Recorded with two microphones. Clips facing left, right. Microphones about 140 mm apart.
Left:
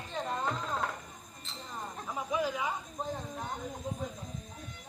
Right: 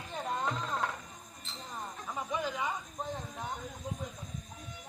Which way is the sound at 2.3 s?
5° left (ahead or behind).